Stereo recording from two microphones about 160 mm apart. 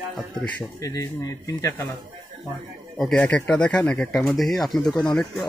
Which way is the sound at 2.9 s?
5° left (ahead or behind).